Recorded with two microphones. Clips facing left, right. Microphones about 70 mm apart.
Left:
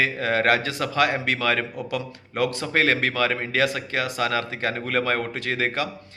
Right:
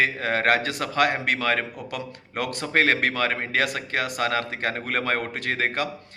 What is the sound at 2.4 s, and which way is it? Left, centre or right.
A man's voice, right.